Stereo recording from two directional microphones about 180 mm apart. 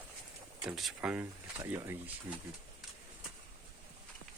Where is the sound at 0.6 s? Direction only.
5° right (ahead or behind).